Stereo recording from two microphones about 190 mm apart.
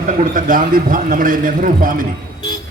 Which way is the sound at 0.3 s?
45° right (ahead or behind).